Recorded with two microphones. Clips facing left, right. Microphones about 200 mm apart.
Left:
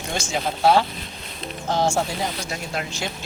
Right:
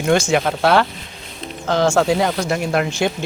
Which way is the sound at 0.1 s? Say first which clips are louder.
Right 10 dB; 70° right (ahead or behind).